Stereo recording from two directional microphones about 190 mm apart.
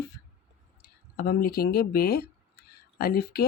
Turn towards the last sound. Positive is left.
turn(degrees=55)  # may be behind; listen again after turning